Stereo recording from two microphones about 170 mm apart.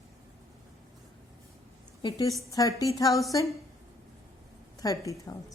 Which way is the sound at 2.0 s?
25° left (ahead or behind).